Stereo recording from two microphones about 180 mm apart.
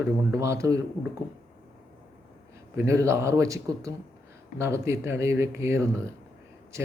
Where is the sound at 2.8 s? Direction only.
15° right (ahead or behind).